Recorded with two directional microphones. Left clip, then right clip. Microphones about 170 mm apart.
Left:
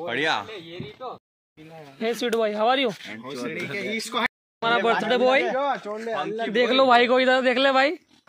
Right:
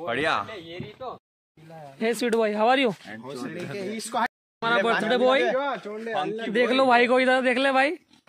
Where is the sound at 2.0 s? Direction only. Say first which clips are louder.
Even; 30° right (ahead or behind).